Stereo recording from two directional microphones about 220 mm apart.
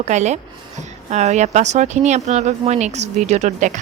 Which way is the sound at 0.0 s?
30° right (ahead or behind).